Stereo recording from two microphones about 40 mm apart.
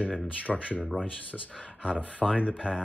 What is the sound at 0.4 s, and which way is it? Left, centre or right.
Speech, left.